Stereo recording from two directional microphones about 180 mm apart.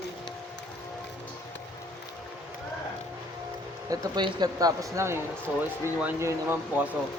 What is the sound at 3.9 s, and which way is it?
Speech, 25° right (ahead or behind).